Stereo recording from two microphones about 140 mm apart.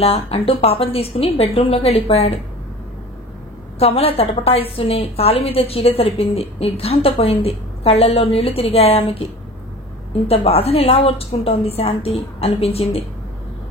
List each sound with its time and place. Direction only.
0.0 s a woman's voice: 45° left (ahead or behind)
3.8 s a woman's voice: 45° left (ahead or behind)